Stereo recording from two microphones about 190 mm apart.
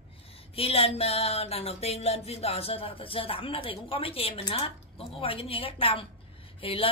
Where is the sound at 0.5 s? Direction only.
30° left (ahead or behind).